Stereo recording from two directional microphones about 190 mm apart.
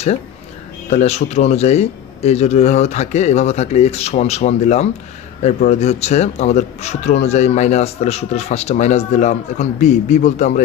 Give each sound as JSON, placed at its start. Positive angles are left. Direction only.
{"t": 0.8, "sound": "a man's voice", "side_deg": 35}